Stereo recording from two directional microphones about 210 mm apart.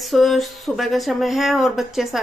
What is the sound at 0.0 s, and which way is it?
A woman's voice, centre (ahead or behind).